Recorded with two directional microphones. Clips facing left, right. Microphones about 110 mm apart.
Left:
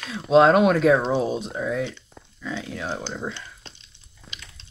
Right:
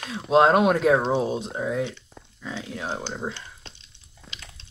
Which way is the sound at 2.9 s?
15° right (ahead or behind).